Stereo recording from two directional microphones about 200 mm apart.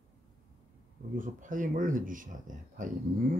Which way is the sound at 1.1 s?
40° right (ahead or behind).